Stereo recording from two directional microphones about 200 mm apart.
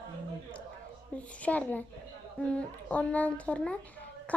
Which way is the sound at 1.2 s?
5° left (ahead or behind).